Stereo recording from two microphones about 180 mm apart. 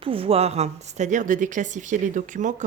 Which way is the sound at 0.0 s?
30° right (ahead or behind).